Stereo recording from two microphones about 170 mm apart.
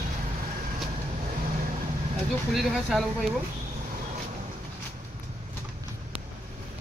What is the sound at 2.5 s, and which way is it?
Speech, centre (ahead or behind).